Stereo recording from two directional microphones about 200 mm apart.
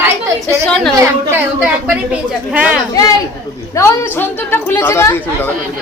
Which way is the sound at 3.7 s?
10° left (ahead or behind).